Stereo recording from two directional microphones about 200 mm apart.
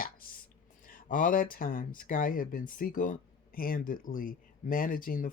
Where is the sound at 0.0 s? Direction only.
45° left (ahead or behind).